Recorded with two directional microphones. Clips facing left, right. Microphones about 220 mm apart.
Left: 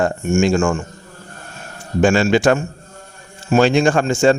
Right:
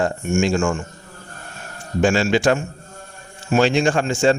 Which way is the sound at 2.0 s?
50° left (ahead or behind).